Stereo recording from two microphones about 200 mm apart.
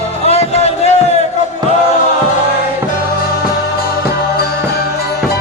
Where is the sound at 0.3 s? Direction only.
30° left (ahead or behind).